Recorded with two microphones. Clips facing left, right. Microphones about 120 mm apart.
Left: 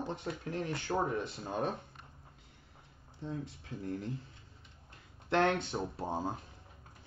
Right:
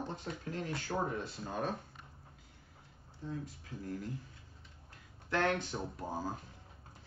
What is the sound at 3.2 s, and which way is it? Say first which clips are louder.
Speech: left 2 dB; 25° left (ahead or behind).